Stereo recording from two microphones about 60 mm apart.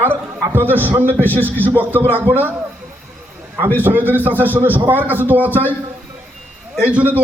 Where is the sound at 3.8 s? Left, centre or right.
Right.